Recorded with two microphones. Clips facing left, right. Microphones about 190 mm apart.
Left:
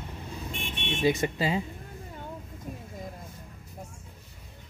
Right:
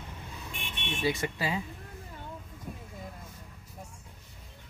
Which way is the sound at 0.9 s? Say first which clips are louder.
Left 5 dB; 20° left (ahead or behind).